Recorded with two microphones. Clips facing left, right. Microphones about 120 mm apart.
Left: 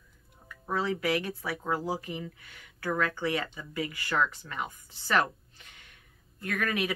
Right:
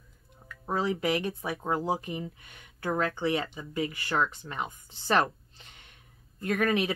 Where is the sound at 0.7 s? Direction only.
20° right (ahead or behind).